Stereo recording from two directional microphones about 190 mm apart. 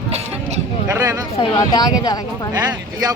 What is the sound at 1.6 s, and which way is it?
Speech, 20° left (ahead or behind).